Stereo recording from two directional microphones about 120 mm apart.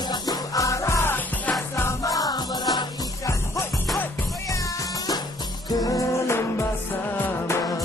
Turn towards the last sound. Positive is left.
turn(degrees=20)  # may be behind; listen again after turning